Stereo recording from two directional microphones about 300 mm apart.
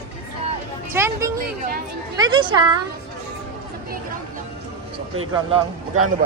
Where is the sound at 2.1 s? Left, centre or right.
Centre.